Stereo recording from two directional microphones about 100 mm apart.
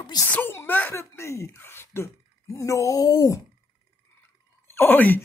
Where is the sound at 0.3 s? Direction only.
20° left (ahead or behind); by 3.3 s 35° left (ahead or behind).